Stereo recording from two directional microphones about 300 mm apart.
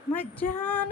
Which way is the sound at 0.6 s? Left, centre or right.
Centre.